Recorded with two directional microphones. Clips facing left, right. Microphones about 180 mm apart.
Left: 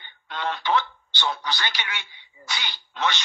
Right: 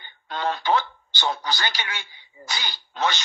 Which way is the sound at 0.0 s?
40° right (ahead or behind).